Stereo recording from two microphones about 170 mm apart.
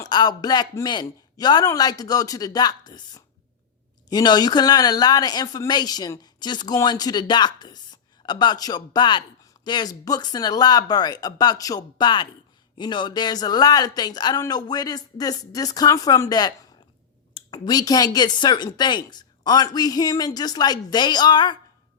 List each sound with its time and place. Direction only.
0.0 s speech: 25° left (ahead or behind)